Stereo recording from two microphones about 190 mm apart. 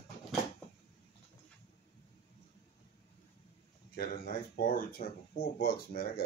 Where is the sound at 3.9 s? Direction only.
55° left (ahead or behind).